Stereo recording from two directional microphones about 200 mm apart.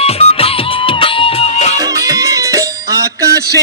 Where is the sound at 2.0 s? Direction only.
15° right (ahead or behind).